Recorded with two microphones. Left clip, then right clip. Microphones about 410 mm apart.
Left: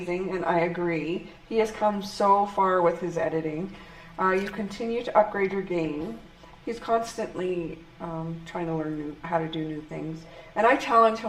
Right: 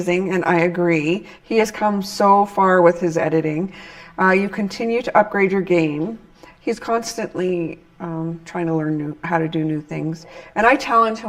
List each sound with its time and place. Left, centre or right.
0.1 s speech: right